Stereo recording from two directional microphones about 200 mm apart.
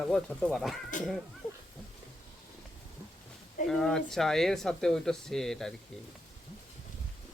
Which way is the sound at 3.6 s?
Centre (ahead or behind).